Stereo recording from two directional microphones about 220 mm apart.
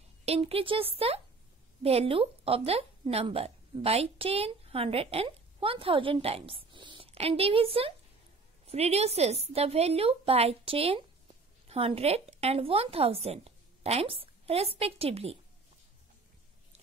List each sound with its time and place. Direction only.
0.2 s a woman's voice: 25° right (ahead or behind)